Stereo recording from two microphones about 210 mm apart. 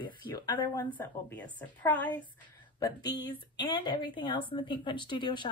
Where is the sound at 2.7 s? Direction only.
20° left (ahead or behind).